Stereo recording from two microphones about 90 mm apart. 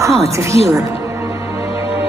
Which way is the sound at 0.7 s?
35° right (ahead or behind).